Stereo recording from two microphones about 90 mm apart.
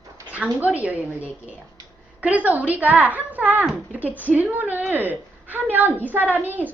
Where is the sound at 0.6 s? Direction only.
15° right (ahead or behind).